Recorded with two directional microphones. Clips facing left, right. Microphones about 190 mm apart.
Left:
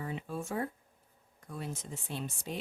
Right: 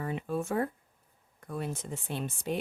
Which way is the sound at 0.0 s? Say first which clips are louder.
Right 5 dB; 60° right (ahead or behind).